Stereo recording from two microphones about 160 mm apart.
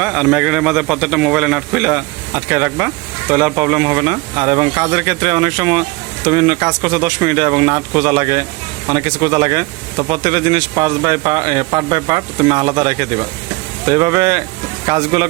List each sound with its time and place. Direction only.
0.0 s a man's voice: 5° right (ahead or behind); by 15.3 s 25° right (ahead or behind)